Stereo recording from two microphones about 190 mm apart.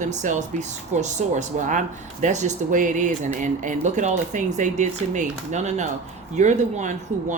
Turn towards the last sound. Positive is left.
turn(degrees=-40)  # may be behind; listen again after turning